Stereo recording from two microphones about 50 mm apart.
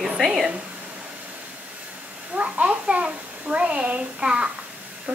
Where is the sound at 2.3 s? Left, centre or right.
Right.